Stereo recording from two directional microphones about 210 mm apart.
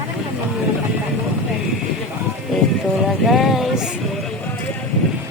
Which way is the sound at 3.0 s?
Centre (ahead or behind).